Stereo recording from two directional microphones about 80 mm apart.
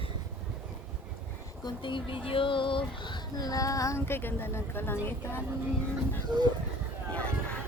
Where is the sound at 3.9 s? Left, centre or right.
Left.